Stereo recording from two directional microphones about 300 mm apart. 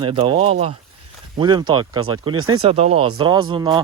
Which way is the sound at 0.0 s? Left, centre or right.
Centre.